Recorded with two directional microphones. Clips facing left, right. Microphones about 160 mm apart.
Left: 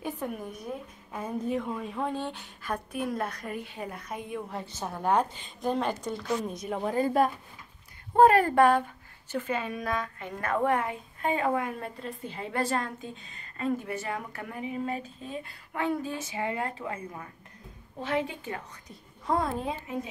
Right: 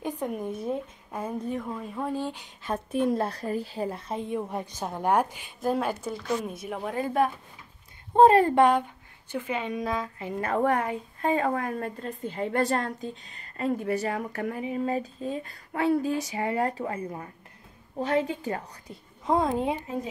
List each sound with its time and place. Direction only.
0.0 s speech: 15° right (ahead or behind)
1.5 s speech: centre (ahead or behind)
8.2 s a woman's voice: 25° right (ahead or behind)
10.6 s a woman's voice: 40° right (ahead or behind)
19.2 s a woman's voice: 20° right (ahead or behind)